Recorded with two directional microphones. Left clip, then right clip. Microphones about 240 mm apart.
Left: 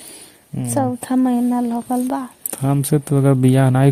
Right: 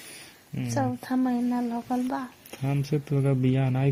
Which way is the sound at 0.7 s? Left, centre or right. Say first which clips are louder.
Left 9 dB; left.